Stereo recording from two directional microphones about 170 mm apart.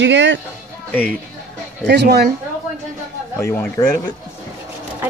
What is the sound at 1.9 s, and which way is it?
Speech, 75° right (ahead or behind).